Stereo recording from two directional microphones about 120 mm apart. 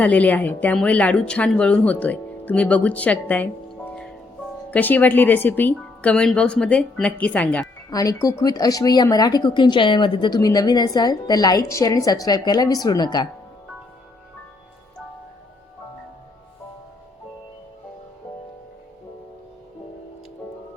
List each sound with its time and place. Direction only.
0.0 s speech: 10° left (ahead or behind)
4.7 s speech: 15° left (ahead or behind)
7.9 s speech: 30° left (ahead or behind)